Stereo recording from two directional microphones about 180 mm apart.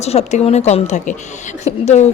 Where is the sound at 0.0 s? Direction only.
35° left (ahead or behind).